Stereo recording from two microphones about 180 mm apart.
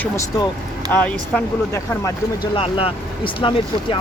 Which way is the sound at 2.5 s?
30° left (ahead or behind).